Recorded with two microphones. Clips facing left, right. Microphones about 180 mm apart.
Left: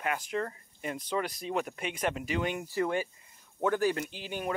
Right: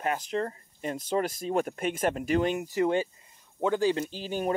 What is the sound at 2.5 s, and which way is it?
Speech, 20° right (ahead or behind).